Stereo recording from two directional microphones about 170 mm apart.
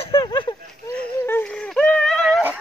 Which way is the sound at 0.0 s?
30° left (ahead or behind).